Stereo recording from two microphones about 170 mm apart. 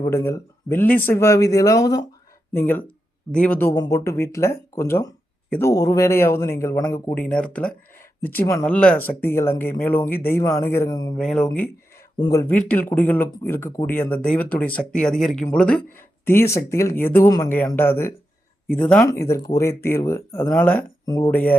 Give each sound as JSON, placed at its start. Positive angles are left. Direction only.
{"t": 0.0, "sound": "speech", "side_deg": 15}
{"t": 11.2, "sound": "speech", "side_deg": 5}
{"t": 12.2, "sound": "speech", "side_deg": 20}